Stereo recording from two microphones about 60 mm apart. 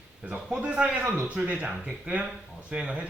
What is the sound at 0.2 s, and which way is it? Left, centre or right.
Speech, right.